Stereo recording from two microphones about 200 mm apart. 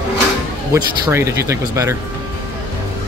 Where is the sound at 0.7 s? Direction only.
15° right (ahead or behind).